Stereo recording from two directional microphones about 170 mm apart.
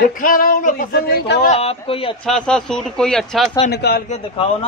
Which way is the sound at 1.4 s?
35° left (ahead or behind).